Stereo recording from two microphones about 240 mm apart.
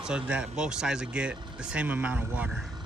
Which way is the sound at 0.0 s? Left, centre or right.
Centre.